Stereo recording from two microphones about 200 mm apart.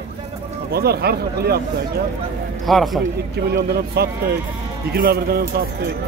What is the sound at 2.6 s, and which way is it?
Speech, centre (ahead or behind).